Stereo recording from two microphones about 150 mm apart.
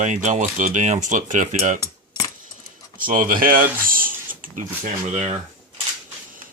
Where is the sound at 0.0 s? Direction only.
55° right (ahead or behind).